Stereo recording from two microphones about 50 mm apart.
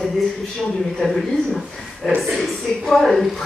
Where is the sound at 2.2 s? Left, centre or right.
Centre.